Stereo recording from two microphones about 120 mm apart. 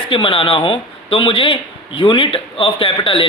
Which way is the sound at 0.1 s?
45° left (ahead or behind).